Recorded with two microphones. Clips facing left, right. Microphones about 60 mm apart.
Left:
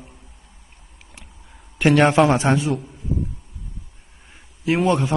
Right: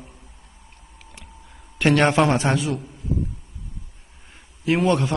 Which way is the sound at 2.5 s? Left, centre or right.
Left.